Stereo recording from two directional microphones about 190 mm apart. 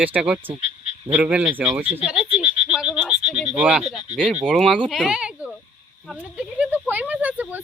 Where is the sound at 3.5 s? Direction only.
5° right (ahead or behind).